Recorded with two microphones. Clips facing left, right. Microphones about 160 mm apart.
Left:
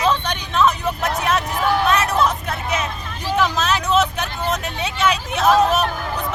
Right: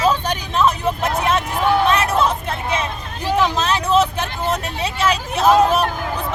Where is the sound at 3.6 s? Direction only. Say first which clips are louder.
Right 2 dB; 30° right (ahead or behind).